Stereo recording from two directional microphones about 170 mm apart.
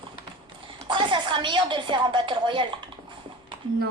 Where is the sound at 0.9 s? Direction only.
25° right (ahead or behind).